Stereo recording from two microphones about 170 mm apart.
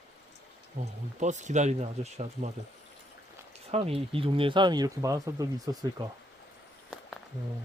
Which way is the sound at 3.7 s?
35° right (ahead or behind).